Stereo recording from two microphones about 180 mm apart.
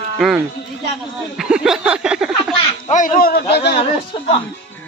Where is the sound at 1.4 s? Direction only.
Centre (ahead or behind).